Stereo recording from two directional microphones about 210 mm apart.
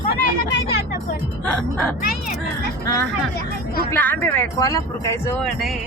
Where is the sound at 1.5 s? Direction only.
5° left (ahead or behind).